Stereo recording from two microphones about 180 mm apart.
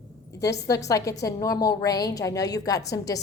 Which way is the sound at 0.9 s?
20° left (ahead or behind).